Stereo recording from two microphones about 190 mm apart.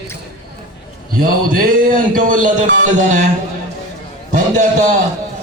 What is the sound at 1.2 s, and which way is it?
A man's voice, 45° right (ahead or behind).